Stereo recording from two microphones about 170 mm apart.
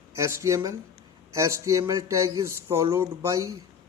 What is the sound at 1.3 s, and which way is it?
A man's voice, 15° right (ahead or behind).